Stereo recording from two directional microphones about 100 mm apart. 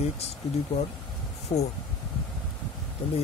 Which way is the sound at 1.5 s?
70° left (ahead or behind).